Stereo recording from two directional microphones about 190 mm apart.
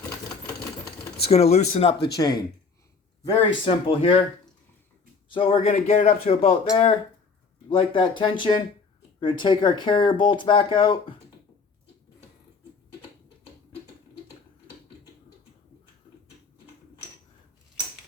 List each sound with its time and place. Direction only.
1.2 s speech: 35° left (ahead or behind)
3.6 s speech: 30° left (ahead or behind)
5.3 s speech: 30° left (ahead or behind)